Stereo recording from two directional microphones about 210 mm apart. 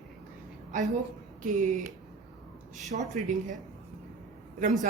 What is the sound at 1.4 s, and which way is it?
Speech, 40° right (ahead or behind).